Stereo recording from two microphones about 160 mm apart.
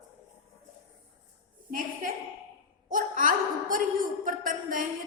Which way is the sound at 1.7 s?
60° right (ahead or behind).